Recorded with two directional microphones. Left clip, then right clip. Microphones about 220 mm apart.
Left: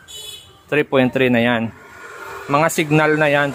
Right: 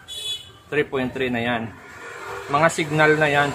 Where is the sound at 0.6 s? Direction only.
45° left (ahead or behind).